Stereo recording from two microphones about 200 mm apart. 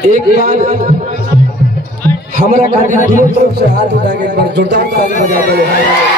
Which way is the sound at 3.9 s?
60° right (ahead or behind).